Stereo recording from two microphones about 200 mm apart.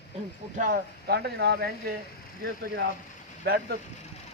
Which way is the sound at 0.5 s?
45° right (ahead or behind).